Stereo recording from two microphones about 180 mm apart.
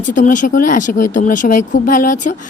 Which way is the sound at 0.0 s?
45° left (ahead or behind).